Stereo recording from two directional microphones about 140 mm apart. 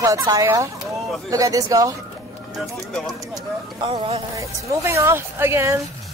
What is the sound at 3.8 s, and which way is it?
Music, 45° right (ahead or behind).